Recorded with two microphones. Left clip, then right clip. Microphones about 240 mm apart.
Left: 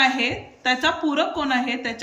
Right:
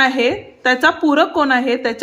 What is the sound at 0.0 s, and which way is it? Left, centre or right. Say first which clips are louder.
A woman's voice: right 5 dB; right.